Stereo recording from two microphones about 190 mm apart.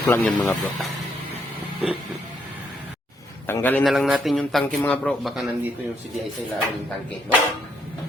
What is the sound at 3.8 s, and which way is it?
A man's voice, centre (ahead or behind).